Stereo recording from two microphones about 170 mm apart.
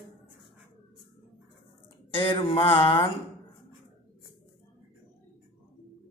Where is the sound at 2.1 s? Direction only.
30° left (ahead or behind).